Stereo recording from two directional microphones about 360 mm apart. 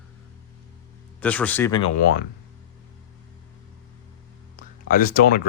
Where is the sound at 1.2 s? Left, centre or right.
Centre.